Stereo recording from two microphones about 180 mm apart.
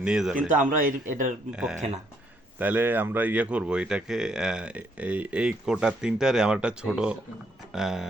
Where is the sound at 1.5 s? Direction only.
5° right (ahead or behind).